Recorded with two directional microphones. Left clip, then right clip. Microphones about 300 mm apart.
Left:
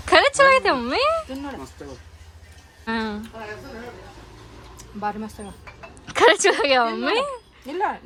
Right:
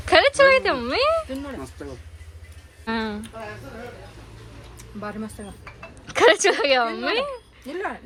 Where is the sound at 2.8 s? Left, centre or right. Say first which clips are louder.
Left 1 dB; centre.